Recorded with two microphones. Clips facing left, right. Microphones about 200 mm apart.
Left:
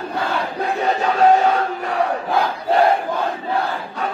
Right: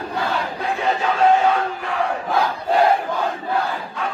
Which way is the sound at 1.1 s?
40° left (ahead or behind).